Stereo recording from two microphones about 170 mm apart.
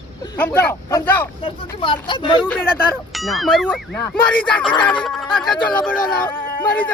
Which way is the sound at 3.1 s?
Centre (ahead or behind).